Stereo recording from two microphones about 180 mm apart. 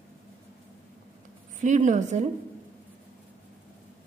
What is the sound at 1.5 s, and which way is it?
Speech, 45° right (ahead or behind).